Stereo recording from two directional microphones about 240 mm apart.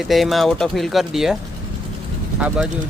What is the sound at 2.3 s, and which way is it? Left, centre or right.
Speech, centre.